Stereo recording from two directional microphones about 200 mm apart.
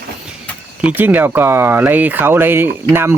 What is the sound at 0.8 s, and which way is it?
Speech, 10° right (ahead or behind).